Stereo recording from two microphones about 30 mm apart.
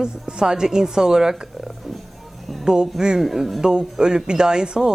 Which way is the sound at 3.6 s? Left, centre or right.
Right.